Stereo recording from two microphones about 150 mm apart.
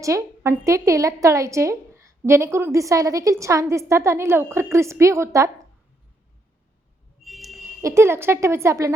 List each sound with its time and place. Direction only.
0.0 s a woman's voice: 20° right (ahead or behind)
7.3 s a sound: centre (ahead or behind)
7.8 s a woman's voice: 20° right (ahead or behind)